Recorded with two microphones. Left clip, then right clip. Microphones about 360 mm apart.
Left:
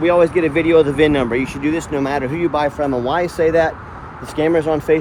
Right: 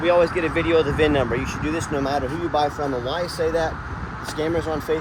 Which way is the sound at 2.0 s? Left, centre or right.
Left.